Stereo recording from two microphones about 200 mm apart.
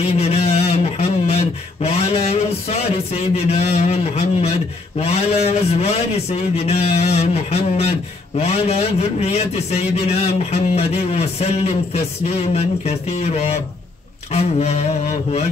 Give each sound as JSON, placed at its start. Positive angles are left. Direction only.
{"t": 0.0, "sound": "speech", "side_deg": 30}